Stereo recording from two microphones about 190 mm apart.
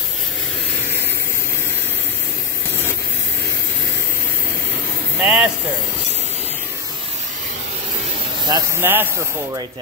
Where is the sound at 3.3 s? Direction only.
50° right (ahead or behind).